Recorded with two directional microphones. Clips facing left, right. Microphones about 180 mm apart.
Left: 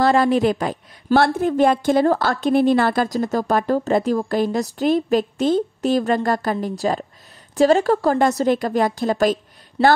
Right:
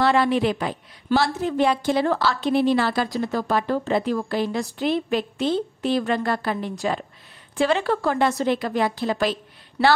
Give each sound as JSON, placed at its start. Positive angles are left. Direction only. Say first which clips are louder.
{"t": 0.0, "sound": "a woman's voice", "louder": "left 3 dB", "side_deg": 40}